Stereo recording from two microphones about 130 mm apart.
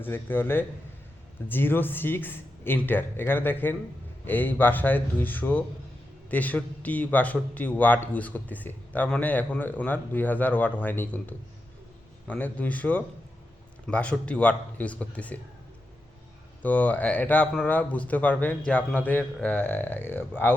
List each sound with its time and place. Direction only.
0.0 s a man's voice: 15° left (ahead or behind)
16.6 s a man's voice: 10° left (ahead or behind)